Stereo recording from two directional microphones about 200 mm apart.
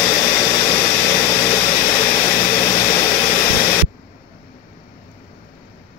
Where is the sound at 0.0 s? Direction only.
20° left (ahead or behind).